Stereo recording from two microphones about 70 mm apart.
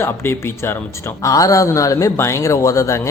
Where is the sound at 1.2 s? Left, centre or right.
Left.